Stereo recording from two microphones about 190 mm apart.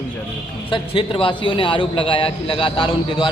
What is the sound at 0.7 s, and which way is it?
A man's voice, 30° left (ahead or behind).